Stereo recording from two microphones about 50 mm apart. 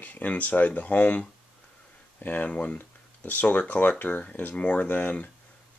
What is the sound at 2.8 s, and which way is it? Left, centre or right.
Speech, left.